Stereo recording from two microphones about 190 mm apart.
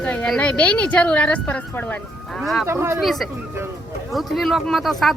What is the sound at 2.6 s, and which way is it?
Speech, 15° right (ahead or behind).